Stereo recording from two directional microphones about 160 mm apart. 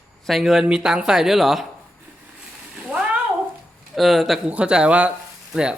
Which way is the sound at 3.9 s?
Centre (ahead or behind).